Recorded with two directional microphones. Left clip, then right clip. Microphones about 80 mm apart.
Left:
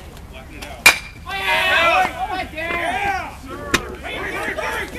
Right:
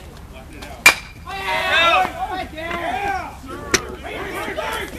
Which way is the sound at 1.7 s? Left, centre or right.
Right.